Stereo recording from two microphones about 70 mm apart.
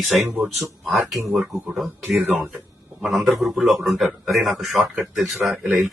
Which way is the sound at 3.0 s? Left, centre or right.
Centre.